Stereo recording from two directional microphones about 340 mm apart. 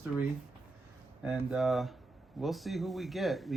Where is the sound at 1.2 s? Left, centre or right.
Centre.